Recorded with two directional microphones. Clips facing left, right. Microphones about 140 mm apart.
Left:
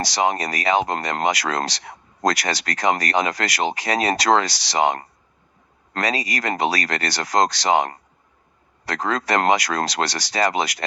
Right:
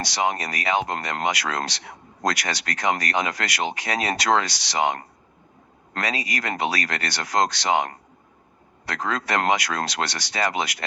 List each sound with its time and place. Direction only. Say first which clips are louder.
0.0 s speech: left 3 dB; 35° left (ahead or behind)